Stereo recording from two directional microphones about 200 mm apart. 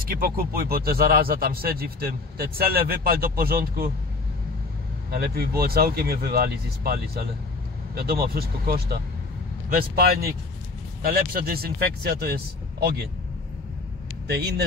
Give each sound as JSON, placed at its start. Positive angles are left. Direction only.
{"t": 0.0, "sound": "speech", "side_deg": -45}
{"t": 5.1, "sound": "speech", "side_deg": -50}
{"t": 14.2, "sound": "speech", "side_deg": -55}